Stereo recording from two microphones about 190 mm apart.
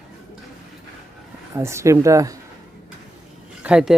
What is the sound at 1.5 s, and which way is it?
Speech, 15° right (ahead or behind).